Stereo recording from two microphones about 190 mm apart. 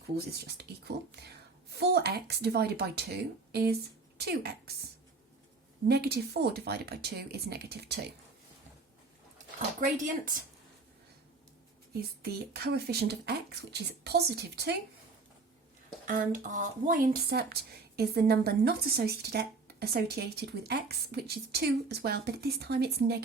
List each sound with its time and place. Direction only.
0.4 s speech: 60° right (ahead or behind)
5.9 s speech: 55° right (ahead or behind)
9.8 s speech: 45° right (ahead or behind)
11.9 s speech: 55° right (ahead or behind)
16.0 s speech: 45° right (ahead or behind)